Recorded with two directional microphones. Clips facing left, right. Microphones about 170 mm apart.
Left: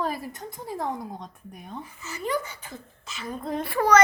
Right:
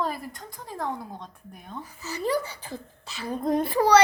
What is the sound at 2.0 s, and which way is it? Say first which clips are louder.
Speech: right 3 dB; 35° right (ahead or behind).